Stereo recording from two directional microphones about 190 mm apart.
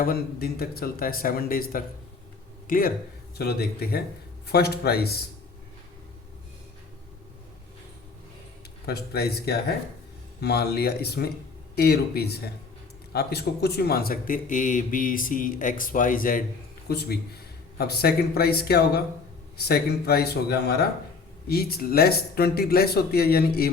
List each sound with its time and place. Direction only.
0.0 s a man's voice: 50° left (ahead or behind)
8.9 s a man's voice: 55° left (ahead or behind)
16.9 s a man's voice: 60° left (ahead or behind)